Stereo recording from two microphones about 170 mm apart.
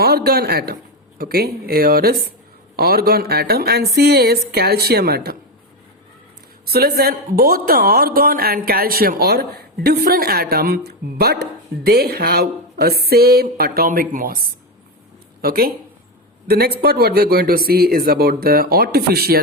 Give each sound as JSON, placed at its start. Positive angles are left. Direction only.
{"t": 0.0, "sound": "a woman's voice", "side_deg": -70}
{"t": 6.7, "sound": "a woman's voice", "side_deg": -65}